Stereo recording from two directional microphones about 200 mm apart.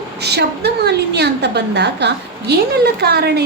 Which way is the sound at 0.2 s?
55° right (ahead or behind).